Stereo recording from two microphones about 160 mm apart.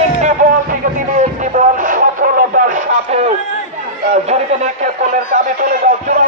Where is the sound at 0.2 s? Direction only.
50° right (ahead or behind).